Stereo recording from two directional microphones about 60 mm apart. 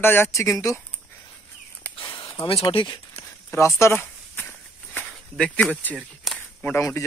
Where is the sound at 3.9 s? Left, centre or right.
Left.